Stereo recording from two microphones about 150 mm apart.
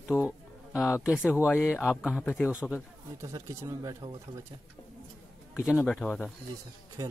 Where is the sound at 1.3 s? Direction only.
15° left (ahead or behind).